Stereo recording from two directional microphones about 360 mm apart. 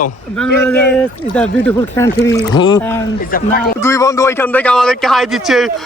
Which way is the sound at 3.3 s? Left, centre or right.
Left.